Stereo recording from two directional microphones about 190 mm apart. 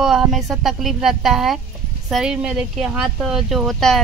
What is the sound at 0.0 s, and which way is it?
Speech, centre (ahead or behind).